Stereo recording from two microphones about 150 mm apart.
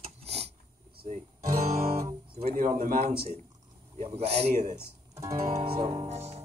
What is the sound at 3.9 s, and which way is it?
A man's voice, 45° right (ahead or behind).